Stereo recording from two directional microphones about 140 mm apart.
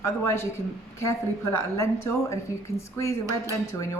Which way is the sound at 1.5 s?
20° left (ahead or behind).